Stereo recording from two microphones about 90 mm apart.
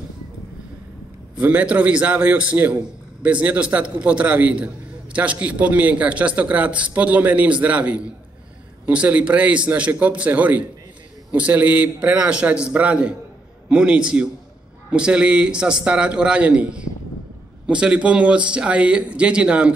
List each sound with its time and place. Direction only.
1.3 s a man's voice: 15° right (ahead or behind)